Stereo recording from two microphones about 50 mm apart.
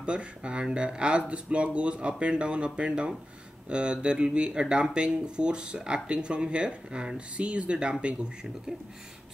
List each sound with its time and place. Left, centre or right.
0.0 s speech: right